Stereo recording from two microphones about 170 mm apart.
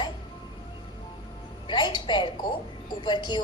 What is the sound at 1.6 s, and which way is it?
A woman's voice, 25° left (ahead or behind).